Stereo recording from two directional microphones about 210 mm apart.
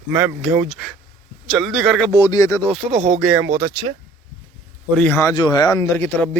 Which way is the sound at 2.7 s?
Centre (ahead or behind).